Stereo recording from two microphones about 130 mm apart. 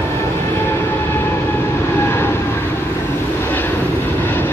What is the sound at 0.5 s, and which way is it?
Vehicle, 20° left (ahead or behind).